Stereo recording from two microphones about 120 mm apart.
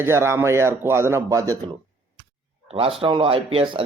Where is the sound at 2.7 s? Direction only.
50° right (ahead or behind).